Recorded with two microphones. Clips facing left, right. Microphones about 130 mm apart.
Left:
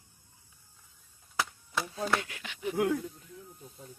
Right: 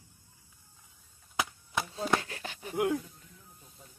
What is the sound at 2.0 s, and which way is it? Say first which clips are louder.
Speech: right 1 dB; 30° right (ahead or behind).